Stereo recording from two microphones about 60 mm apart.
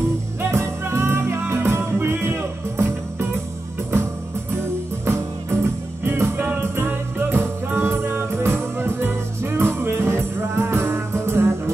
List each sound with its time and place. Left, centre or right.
0.4 s music: right
5.0 s music: right